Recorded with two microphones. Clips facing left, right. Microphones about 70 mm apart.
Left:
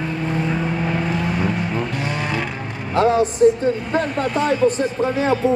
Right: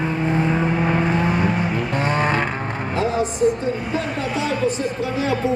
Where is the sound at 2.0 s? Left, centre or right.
Right.